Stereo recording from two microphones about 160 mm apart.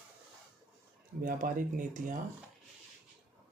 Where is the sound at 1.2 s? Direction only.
60° right (ahead or behind).